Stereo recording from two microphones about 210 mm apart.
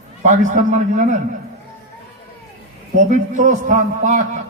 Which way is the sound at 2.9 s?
35° right (ahead or behind).